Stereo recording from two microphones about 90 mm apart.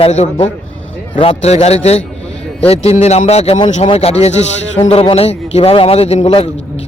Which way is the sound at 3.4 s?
80° left.